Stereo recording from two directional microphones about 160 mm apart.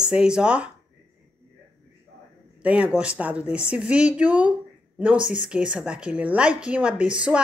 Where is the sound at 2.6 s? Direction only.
10° right (ahead or behind).